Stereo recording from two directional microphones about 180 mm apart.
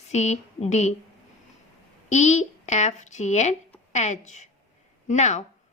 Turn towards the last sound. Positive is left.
turn(degrees=40)  # may be behind; listen again after turning